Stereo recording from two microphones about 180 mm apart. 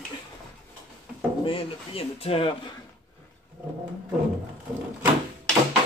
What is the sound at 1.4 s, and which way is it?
Speech, 30° left (ahead or behind).